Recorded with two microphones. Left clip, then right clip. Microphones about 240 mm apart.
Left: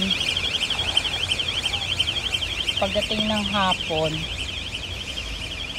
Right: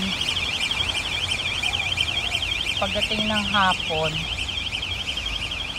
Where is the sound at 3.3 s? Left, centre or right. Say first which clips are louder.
Right 3 dB; right.